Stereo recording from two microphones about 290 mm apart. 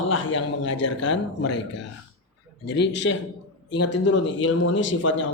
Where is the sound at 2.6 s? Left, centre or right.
Left.